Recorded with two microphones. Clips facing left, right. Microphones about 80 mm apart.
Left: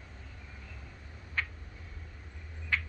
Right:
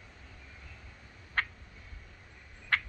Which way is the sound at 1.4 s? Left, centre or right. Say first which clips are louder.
Right 3 dB; right.